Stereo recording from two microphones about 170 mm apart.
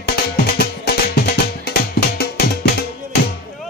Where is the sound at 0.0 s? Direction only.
65° left (ahead or behind).